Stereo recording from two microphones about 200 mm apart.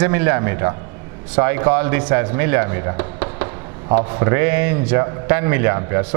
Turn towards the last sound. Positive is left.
turn(degrees=-15)  # may be behind; listen again after turning